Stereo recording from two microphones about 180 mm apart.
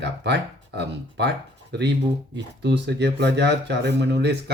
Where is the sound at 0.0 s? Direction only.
70° right (ahead or behind).